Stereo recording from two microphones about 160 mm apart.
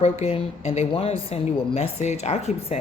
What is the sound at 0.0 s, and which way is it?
A woman's voice, 40° left (ahead or behind).